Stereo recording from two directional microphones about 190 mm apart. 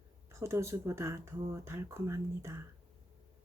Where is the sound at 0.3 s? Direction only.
15° right (ahead or behind).